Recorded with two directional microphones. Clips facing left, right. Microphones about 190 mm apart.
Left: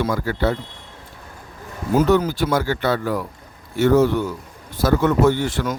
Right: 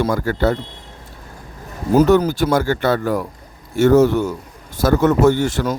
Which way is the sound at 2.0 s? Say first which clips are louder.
Right 4 dB; 45° right (ahead or behind).